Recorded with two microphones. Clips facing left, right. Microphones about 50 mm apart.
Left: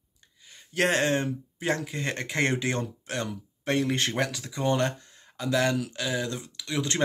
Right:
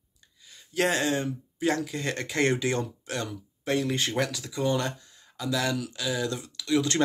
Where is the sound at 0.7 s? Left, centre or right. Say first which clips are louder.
Left 1 dB; left.